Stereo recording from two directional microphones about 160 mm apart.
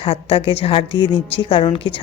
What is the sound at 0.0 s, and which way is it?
Speech, 35° left (ahead or behind).